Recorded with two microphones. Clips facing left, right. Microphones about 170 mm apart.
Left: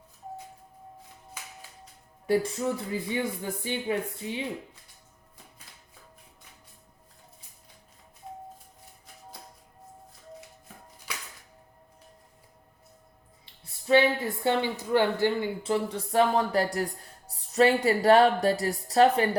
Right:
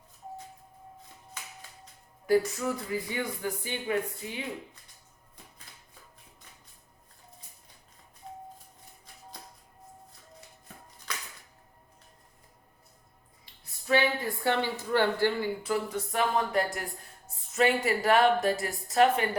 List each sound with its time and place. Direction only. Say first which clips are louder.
2.2 s speech: even; 25° left (ahead or behind)
11.1 s music: even; 10° left (ahead or behind)
13.4 s a sound: left 4 dB; 25° left (ahead or behind)
14.4 s speech: left 2 dB; 20° left (ahead or behind)